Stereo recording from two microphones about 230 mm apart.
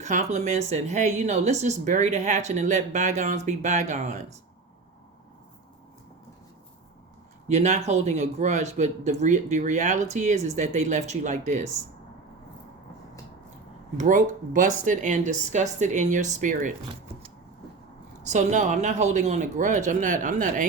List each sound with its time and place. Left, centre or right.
0.0 s a woman's voice: right
7.4 s speech: right
13.9 s a woman's voice: right
18.3 s a woman's voice: right